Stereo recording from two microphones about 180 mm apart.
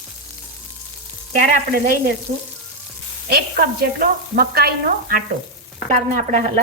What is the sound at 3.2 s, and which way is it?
Sizzle, 55° right (ahead or behind).